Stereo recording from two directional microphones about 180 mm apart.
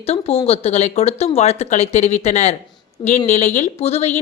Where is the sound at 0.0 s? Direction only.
35° left (ahead or behind).